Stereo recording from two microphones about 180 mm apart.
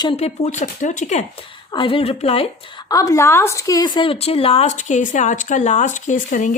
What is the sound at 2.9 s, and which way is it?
Speech, 20° left (ahead or behind).